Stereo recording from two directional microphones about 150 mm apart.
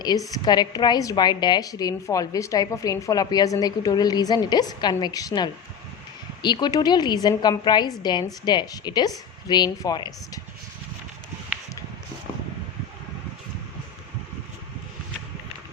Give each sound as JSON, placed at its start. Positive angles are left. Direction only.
{"t": 0.0, "sound": "a woman's voice", "side_deg": 25}